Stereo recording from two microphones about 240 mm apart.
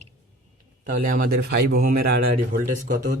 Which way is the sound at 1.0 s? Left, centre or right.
Right.